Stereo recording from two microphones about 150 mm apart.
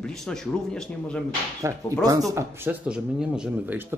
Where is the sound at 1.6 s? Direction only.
20° right (ahead or behind).